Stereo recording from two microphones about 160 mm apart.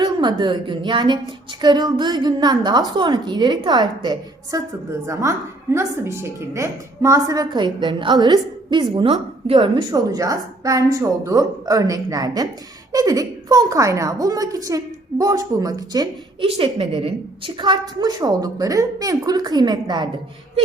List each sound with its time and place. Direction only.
0.0 s a woman's voice: 30° right (ahead or behind)
16.4 s a woman's voice: 35° right (ahead or behind)